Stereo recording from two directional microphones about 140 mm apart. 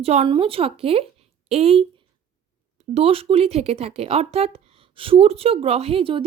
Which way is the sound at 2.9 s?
45° right (ahead or behind).